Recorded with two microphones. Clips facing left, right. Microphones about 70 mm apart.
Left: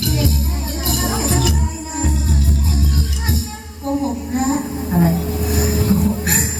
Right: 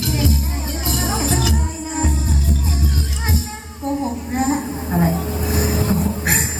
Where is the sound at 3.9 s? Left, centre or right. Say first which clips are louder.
Left 2 dB; right.